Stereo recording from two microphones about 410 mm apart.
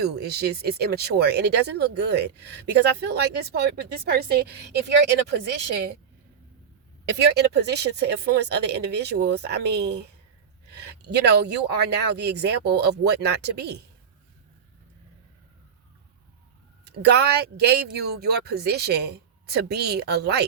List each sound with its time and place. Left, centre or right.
0.0 s speech: right
7.1 s speech: right
17.0 s speech: right